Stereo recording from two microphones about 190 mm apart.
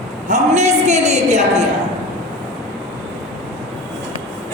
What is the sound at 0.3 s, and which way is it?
A woman's voice, 35° right (ahead or behind).